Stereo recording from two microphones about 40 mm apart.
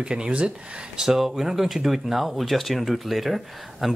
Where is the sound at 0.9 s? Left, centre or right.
Centre.